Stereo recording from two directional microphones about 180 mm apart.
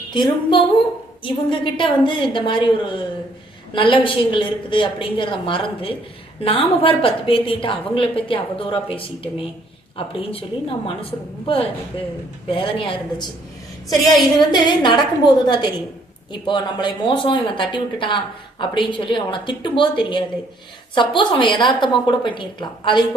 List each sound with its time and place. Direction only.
0.1 s a woman's voice: 25° left (ahead or behind)
14.3 s a woman's voice: 25° left (ahead or behind)